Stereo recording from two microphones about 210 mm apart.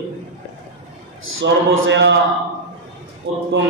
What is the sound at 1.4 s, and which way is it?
Speech, 60° right (ahead or behind).